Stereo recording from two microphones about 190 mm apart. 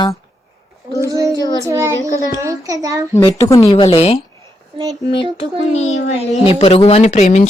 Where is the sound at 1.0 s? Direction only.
15° right (ahead or behind).